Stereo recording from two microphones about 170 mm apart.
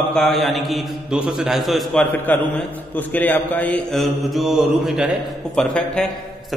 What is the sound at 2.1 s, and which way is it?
Speech, 10° left (ahead or behind).